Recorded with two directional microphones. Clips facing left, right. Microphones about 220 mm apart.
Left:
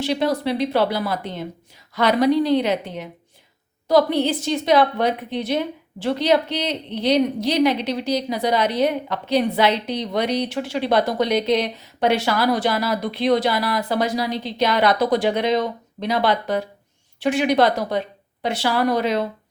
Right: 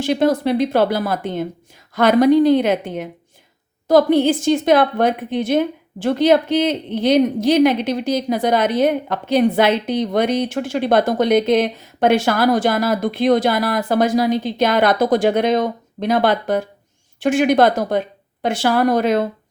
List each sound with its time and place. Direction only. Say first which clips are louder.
0.0 s a woman's voice: right 5 dB; 50° right (ahead or behind)